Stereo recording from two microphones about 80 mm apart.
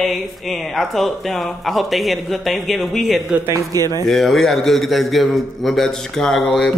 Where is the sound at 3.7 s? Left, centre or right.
Right.